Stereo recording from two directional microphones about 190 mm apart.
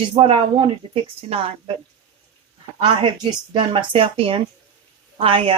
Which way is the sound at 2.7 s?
30° right (ahead or behind).